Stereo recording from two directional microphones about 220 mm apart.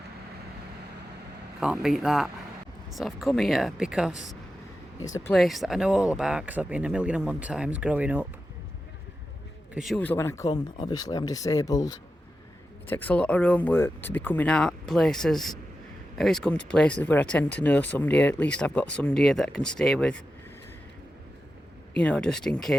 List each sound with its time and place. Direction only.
1.6 s speech: centre (ahead or behind)
4.9 s speech: 15° left (ahead or behind)
5.3 s speech: centre (ahead or behind)
9.7 s speech: centre (ahead or behind)
22.0 s speech: 5° left (ahead or behind)